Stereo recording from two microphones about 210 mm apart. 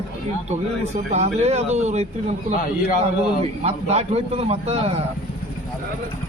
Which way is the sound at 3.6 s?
30° right (ahead or behind).